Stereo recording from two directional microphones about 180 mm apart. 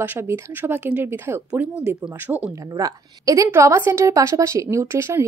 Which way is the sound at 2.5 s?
20° right (ahead or behind).